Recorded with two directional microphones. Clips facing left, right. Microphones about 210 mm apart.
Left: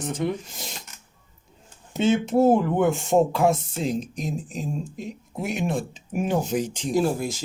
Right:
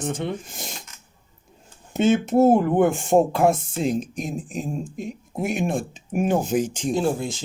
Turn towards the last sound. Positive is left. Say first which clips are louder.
# even
turn(degrees=-25)  # may be behind; listen again after turning